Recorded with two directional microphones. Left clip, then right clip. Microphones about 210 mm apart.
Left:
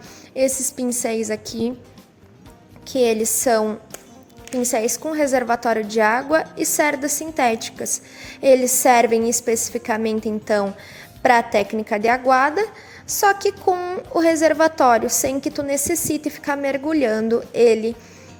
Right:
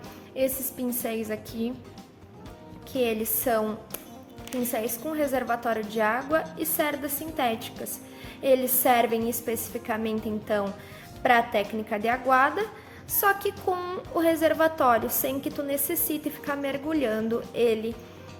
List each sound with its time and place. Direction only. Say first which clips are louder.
0.3 s a woman's voice: left 8 dB; 30° left (ahead or behind)
2.9 s a woman's voice: left 9 dB; 35° left (ahead or behind)